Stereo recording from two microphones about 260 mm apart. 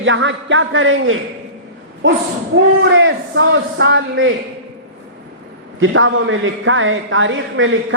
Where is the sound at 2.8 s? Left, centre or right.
Right.